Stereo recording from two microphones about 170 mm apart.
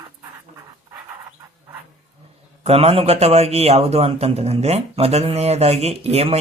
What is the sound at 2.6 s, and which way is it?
A man's voice, 35° right (ahead or behind).